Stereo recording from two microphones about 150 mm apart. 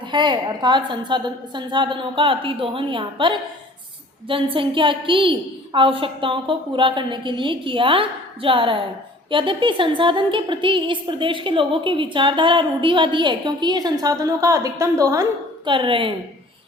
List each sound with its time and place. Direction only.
0.0 s a woman's voice: 30° right (ahead or behind)